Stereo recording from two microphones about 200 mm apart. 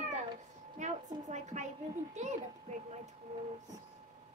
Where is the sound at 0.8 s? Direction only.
35° right (ahead or behind).